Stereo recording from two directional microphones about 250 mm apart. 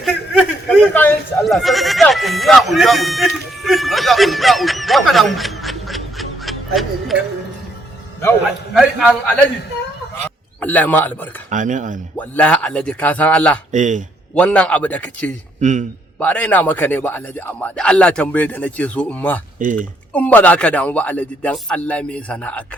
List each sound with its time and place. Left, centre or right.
0.0 s goat: centre
8.4 s a man's voice: centre
11.4 s speech: right
12.1 s speech: centre
13.7 s speech: right
14.3 s speech: centre
15.6 s speech: right
16.2 s speech: centre
19.5 s speech: right
20.1 s speech: centre